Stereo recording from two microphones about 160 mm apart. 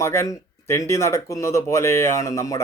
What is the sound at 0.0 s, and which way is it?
Speech, 15° left (ahead or behind).